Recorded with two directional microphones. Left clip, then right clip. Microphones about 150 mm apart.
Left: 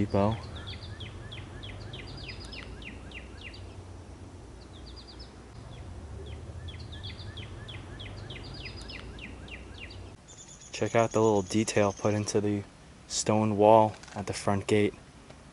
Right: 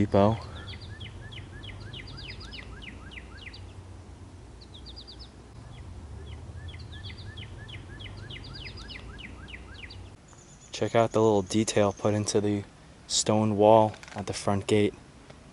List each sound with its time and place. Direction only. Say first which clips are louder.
0.0 s a sound: right 5 dB; 10° right (ahead or behind)
8.0 s bird: even; 15° right (ahead or behind)
10.7 s speech: right 2 dB; 5° right (ahead or behind)